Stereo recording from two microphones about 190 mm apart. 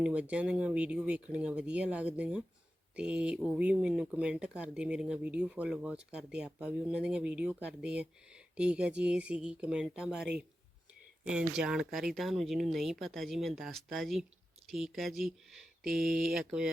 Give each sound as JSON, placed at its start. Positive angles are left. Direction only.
{"t": 0.0, "sound": "speech", "side_deg": -5}